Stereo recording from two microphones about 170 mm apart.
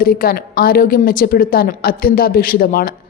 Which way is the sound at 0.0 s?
60° left (ahead or behind).